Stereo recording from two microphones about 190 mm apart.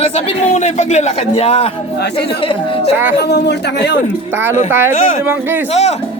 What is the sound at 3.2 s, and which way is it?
Speech, 60° left (ahead or behind).